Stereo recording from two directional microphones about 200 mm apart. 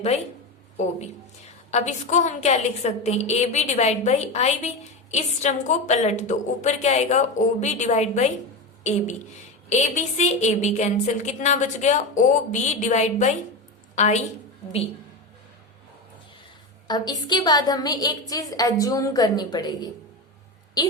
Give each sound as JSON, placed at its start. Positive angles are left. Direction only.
{"t": 1.7, "sound": "a woman's voice", "side_deg": 35}
{"t": 16.8, "sound": "a woman's voice", "side_deg": 20}